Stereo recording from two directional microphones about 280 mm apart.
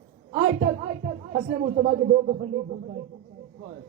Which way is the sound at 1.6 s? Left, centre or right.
Right.